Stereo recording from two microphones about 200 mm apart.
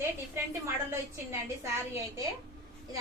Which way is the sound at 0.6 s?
15° right (ahead or behind).